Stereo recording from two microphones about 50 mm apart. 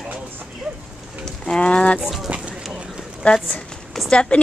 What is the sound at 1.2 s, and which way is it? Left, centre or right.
Speech, centre.